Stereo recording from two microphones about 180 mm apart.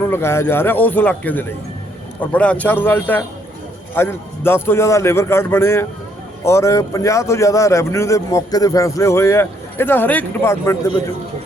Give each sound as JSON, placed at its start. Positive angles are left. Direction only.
{"t": 0.0, "sound": "a man's voice", "side_deg": 15}